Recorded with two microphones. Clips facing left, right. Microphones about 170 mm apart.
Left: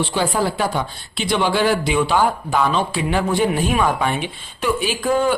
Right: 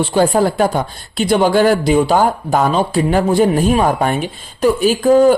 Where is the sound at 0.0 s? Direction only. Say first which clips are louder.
Right 7 dB; 45° right (ahead or behind).